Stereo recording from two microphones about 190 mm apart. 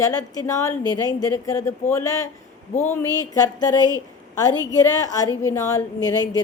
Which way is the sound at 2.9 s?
20° left (ahead or behind).